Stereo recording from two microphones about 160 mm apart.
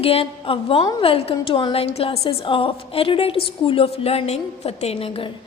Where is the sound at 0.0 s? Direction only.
35° left (ahead or behind).